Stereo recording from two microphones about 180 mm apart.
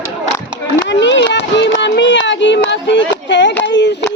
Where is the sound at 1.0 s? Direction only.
85° left.